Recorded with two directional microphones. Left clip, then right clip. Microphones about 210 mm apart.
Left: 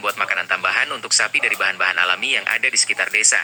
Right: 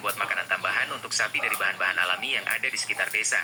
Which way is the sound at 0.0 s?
50° left (ahead or behind).